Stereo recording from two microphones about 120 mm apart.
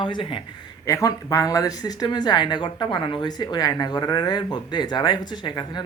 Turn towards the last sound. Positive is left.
turn(degrees=40)  # may be behind; listen again after turning